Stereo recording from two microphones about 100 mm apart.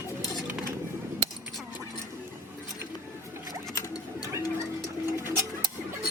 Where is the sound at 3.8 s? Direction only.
35° left (ahead or behind).